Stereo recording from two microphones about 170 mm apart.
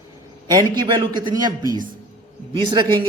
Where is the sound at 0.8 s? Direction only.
25° right (ahead or behind).